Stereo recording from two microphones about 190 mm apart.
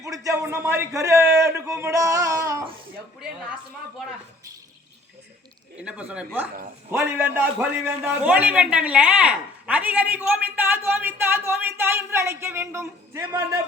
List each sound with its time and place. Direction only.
0.0 s a man's voice: 15° right (ahead or behind)
5.7 s a woman's voice: 5° right (ahead or behind)